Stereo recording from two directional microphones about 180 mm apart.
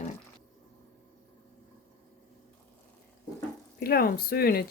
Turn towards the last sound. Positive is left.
turn(degrees=55)  # may be behind; listen again after turning